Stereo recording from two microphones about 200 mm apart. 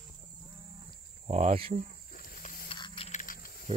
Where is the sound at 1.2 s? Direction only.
35° right (ahead or behind).